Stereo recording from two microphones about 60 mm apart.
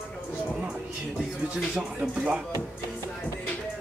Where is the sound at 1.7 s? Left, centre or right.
Centre.